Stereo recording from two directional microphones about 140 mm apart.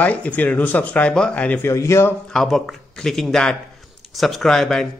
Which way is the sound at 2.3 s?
5° left (ahead or behind).